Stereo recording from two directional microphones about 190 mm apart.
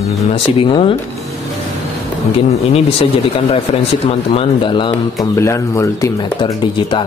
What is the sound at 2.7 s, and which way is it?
A man's voice, 30° left (ahead or behind).